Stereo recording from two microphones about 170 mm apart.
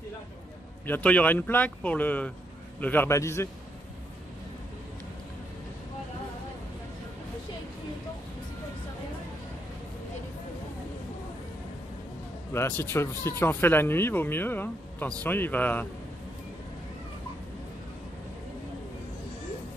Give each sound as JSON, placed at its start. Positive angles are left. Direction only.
{"t": 0.8, "sound": "speech", "side_deg": 10}
{"t": 12.8, "sound": "speech", "side_deg": 15}